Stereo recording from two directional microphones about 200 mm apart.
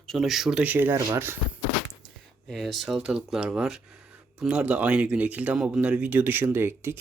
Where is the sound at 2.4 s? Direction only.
Centre (ahead or behind).